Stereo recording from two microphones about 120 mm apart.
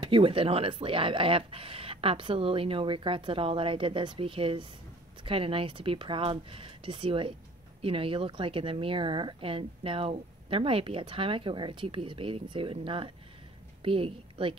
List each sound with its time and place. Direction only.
0.0 s a woman's voice: 45° right (ahead or behind)